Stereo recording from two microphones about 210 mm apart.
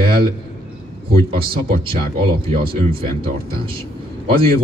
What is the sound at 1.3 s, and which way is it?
Speech, 45° right (ahead or behind).